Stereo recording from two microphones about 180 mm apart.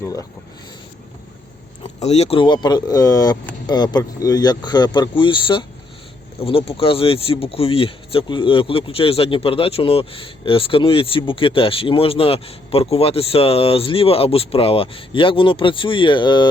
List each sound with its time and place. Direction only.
0.0 s speech: 15° left (ahead or behind)
1.8 s speech: 35° left (ahead or behind)